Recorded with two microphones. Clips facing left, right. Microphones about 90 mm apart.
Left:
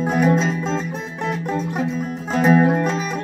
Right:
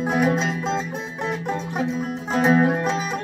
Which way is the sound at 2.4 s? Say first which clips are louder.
Left 3 dB; 5° right (ahead or behind).